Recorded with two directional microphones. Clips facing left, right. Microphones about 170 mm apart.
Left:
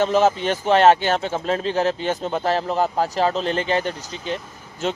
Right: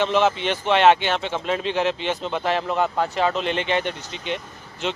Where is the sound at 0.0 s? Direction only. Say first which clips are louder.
Left 2 dB; 40° left (ahead or behind).